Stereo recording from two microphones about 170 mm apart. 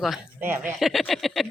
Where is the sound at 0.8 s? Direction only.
Centre (ahead or behind).